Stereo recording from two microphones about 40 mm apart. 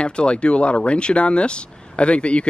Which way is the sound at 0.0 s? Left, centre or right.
Left.